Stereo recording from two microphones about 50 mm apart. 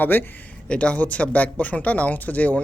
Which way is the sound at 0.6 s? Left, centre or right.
Left.